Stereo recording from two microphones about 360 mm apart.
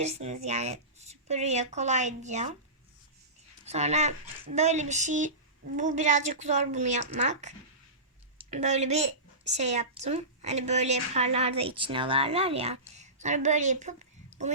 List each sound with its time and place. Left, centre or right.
0.0 s a woman's voice: centre
3.7 s a woman's voice: centre